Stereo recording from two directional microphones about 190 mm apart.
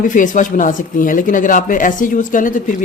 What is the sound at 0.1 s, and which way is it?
Speech, 40° left (ahead or behind).